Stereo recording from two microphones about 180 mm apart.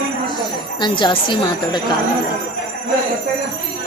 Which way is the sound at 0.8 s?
25° left (ahead or behind).